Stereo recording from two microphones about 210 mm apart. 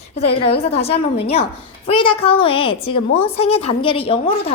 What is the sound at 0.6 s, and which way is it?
A woman's voice, 30° left (ahead or behind).